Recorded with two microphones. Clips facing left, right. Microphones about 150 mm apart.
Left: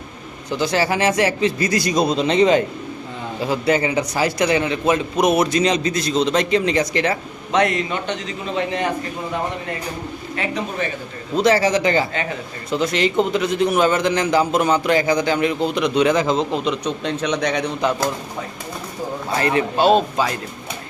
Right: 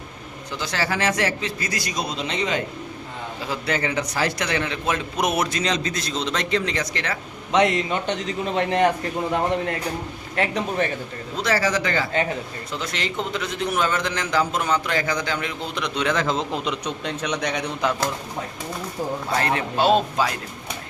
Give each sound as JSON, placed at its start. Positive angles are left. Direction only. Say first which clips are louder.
{"t": 0.6, "sound": "a man's voice", "louder": "left 6 dB", "side_deg": 15}
{"t": 3.5, "sound": "a man's voice", "louder": "left 6 dB", "side_deg": 15}
{"t": 7.5, "sound": "a man's voice", "louder": "left 1 dB", "side_deg": -20}
{"t": 8.5, "sound": "a man's voice", "louder": "right 3 dB", "side_deg": -55}
{"t": 11.3, "sound": "a man's voice", "louder": "left 6 dB", "side_deg": 20}
{"t": 19.4, "sound": "speech", "louder": "left 5 dB", "side_deg": 5}